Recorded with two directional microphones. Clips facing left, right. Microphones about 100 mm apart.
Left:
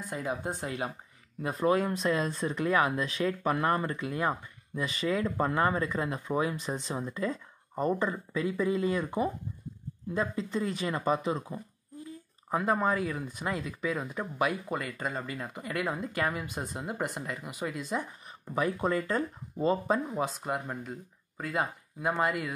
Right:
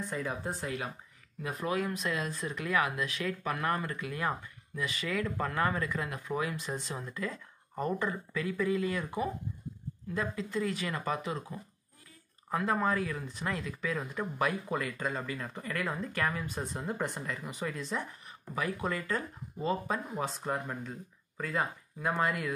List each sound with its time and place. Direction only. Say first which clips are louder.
0.1 s speech: left 6 dB; 20° left (ahead or behind)
18.5 s speech: left 5 dB; 30° left (ahead or behind)
20.2 s speech: left 1 dB; 10° left (ahead or behind)